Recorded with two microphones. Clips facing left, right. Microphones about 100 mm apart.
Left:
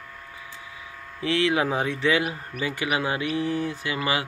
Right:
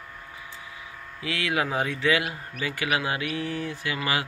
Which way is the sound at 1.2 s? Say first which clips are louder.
Left 5 dB; 30° left (ahead or behind).